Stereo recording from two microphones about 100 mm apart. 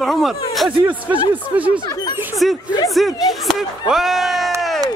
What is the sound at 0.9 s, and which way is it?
Speech, 15° right (ahead or behind).